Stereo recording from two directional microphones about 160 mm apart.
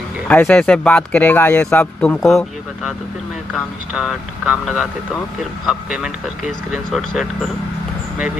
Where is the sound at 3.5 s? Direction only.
Centre (ahead or behind).